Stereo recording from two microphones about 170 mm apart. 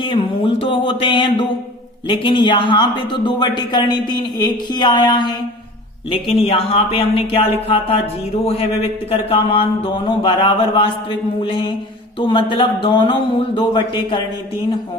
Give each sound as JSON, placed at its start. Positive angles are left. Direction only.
{"t": 0.0, "sound": "speech", "side_deg": 30}